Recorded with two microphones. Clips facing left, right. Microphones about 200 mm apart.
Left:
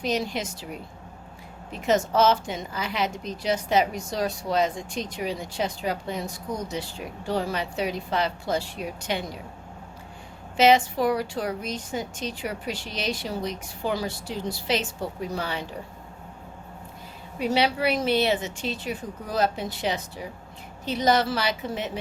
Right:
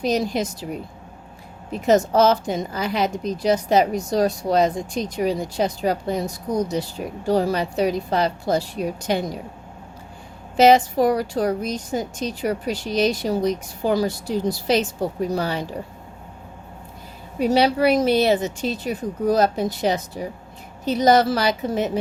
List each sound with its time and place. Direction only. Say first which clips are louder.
0.0 s a woman's voice: right 6 dB; 40° right (ahead or behind)
10.6 s a woman's voice: right 5 dB; 40° right (ahead or behind)
17.4 s a woman's voice: right 6 dB; 40° right (ahead or behind)